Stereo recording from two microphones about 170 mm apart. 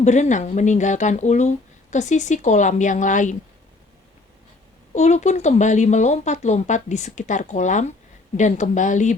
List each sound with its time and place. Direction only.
0.0 s speech: 45° left (ahead or behind)
4.9 s speech: 40° left (ahead or behind)